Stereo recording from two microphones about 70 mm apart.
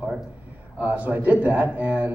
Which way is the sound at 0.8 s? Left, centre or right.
Centre.